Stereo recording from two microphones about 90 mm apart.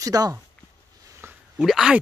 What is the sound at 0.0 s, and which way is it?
Speech, 40° right (ahead or behind).